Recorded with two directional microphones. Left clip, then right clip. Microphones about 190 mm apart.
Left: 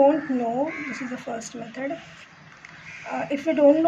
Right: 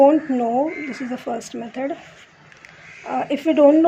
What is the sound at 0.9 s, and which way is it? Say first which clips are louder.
Speech: right 5 dB; 40° right (ahead or behind).